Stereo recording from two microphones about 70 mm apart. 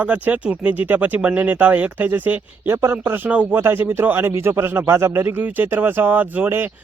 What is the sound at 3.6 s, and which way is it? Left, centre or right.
Speech, right.